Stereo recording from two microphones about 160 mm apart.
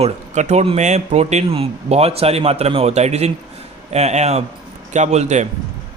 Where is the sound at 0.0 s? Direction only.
45° right (ahead or behind).